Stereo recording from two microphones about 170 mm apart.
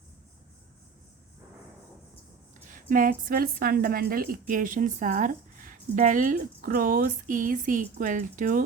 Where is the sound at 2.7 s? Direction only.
55° right (ahead or behind).